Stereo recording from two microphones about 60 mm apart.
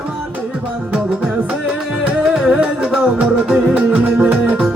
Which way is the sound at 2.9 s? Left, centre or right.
Centre.